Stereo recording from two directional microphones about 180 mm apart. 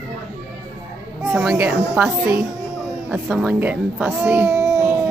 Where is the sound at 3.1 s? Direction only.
5° right (ahead or behind).